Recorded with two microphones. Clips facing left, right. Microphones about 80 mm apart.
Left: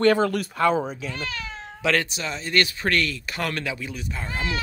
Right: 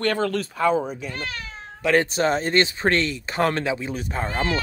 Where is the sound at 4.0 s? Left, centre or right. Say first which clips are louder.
Right 5 dB; right.